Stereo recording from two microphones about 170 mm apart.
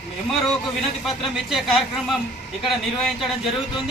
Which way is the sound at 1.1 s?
Centre (ahead or behind).